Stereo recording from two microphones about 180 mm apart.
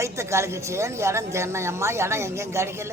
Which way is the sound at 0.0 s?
15° right (ahead or behind).